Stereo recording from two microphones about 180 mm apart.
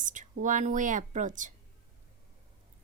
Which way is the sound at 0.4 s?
45° right (ahead or behind).